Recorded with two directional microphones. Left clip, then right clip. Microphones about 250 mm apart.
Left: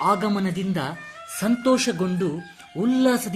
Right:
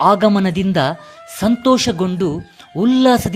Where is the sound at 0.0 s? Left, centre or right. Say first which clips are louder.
Right 9 dB; right.